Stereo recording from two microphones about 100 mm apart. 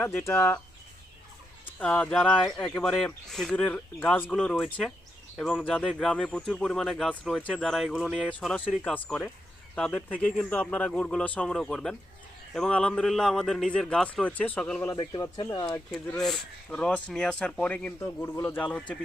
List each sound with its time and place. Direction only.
0.0 s speech: 20° left (ahead or behind)
1.6 s a man's voice: 15° left (ahead or behind)
2.6 s a man's voice: 5° left (ahead or behind)
8.8 s a man's voice: 10° left (ahead or behind)
14.9 s speech: 45° left (ahead or behind)
16.2 s a man's voice: 5° left (ahead or behind)
18.0 s speech: 30° left (ahead or behind)
18.6 s a man's voice: 10° left (ahead or behind)